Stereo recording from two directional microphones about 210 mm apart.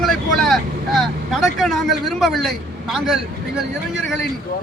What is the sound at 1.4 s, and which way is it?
A man's voice, centre (ahead or behind).